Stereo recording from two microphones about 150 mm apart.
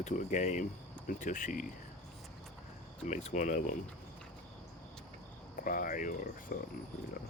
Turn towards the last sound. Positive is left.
turn(degrees=65)  # may be behind; listen again after turning